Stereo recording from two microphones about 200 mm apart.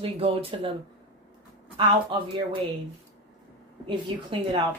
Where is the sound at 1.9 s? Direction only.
25° right (ahead or behind).